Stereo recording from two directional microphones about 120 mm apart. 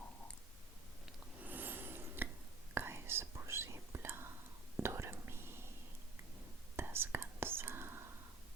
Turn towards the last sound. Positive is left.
turn(degrees=-20)  # may be behind; listen again after turning